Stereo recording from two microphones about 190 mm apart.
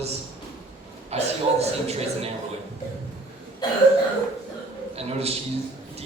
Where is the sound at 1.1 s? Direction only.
35° right (ahead or behind).